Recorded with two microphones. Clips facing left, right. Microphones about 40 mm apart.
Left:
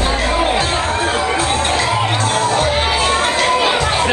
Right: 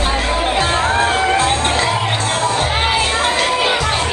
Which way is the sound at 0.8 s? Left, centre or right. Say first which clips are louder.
Right 2 dB; right.